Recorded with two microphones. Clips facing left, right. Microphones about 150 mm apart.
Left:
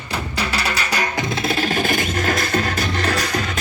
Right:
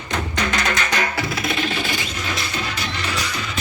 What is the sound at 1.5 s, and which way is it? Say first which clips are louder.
Music: left 4 dB; 40° left (ahead or behind).